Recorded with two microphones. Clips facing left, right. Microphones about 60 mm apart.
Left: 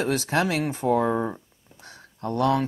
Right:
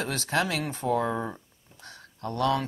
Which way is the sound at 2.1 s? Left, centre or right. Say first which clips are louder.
Left 4 dB; left.